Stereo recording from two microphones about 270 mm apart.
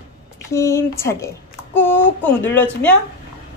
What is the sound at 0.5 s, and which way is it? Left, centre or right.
Speech, centre.